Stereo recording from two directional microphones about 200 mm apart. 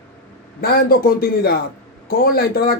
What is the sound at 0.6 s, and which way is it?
Speech, 50° left (ahead or behind).